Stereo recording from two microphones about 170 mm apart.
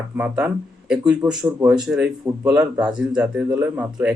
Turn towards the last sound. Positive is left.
turn(degrees=-10)  # may be behind; listen again after turning